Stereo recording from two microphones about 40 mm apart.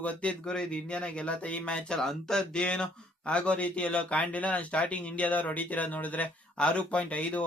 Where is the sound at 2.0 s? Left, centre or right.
Centre.